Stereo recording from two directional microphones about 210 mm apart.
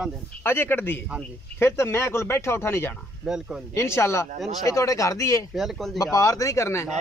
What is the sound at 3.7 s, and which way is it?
Speech, 15° left (ahead or behind).